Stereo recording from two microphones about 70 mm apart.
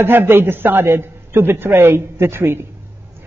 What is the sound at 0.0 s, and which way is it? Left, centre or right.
A man's voice, right.